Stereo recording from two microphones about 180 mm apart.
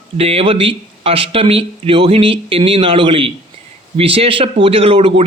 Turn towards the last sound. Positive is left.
turn(degrees=-30)  # may be behind; listen again after turning